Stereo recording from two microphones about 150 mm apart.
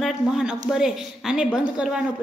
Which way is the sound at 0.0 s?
5° right (ahead or behind).